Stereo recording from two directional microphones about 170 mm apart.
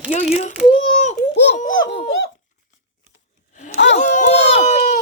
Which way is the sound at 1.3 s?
90° left.